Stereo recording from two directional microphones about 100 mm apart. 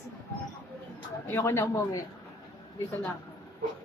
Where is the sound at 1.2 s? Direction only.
25° left (ahead or behind).